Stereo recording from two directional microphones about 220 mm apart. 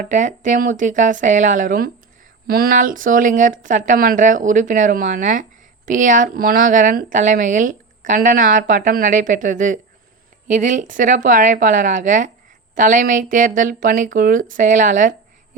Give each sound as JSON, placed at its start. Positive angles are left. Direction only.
{"t": 0.0, "sound": "speech", "side_deg": -35}